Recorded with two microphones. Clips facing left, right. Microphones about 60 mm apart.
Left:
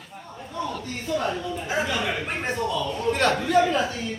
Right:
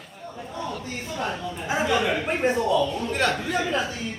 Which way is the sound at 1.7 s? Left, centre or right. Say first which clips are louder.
Right 4 dB; centre.